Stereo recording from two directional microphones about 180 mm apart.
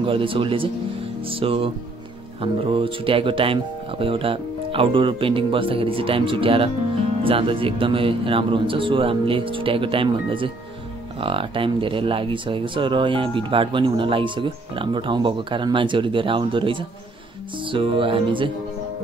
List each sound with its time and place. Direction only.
0.0 s speech: 30° right (ahead or behind)